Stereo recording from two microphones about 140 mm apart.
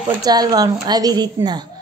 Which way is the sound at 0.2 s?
30° right (ahead or behind).